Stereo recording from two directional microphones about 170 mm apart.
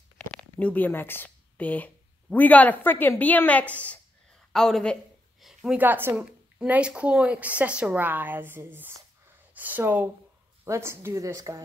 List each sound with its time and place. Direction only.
0.3 s a woman's voice: 5° left (ahead or behind); by 11.6 s 20° right (ahead or behind)